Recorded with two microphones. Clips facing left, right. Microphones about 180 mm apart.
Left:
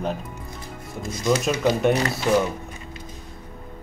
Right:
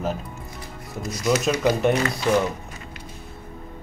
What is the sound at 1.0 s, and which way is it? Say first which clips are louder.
Speech: even; 25° left (ahead or behind).